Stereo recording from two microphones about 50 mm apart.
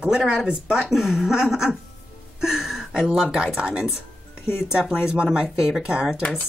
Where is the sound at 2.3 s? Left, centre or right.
Centre.